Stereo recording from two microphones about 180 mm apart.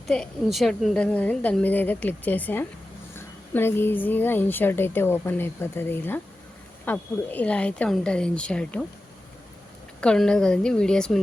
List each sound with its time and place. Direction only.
0.1 s a woman's voice: centre (ahead or behind)
10.0 s a woman's voice: 5° left (ahead or behind)